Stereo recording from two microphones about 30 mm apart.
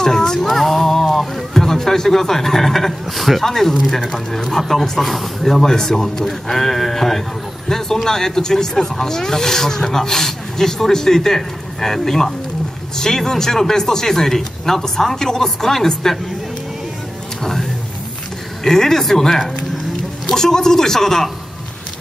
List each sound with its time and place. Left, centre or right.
0.0 s music: centre
0.4 s music: centre
1.1 s a man's voice: centre
17.4 s speech: centre